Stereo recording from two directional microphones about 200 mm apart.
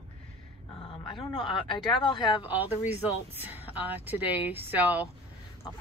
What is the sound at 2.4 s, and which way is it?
Speech, 10° right (ahead or behind).